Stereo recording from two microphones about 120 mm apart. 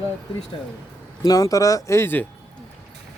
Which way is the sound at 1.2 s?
30° left (ahead or behind).